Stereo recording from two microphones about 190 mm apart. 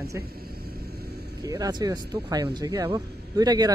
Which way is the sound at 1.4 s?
20° right (ahead or behind).